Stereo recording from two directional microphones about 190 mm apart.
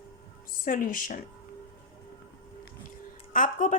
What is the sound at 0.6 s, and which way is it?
Speech, 45° left (ahead or behind).